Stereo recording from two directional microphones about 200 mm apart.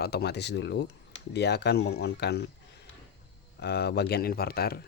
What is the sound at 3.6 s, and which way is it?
Speech, 55° left (ahead or behind).